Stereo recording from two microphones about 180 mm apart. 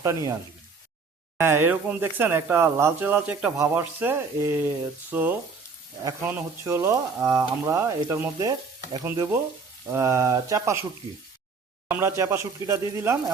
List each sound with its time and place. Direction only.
0.0 s speech: 20° right (ahead or behind)
1.4 s speech: 15° right (ahead or behind)
6.0 s speech: 20° right (ahead or behind)
11.9 s speech: 15° right (ahead or behind)